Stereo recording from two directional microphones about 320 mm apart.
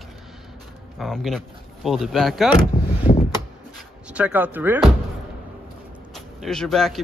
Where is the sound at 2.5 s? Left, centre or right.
Centre.